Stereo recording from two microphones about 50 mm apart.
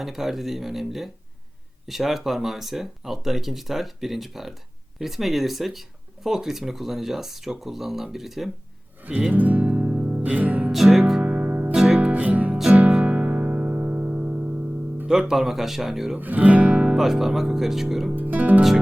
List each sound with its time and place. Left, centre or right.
0.0 s speech: centre
9.0 s music: right
10.7 s music: centre
11.2 s music: right
11.7 s music: centre
12.1 s music: right
15.0 s speech: centre
16.1 s music: right
16.9 s speech: centre
18.2 s speech: right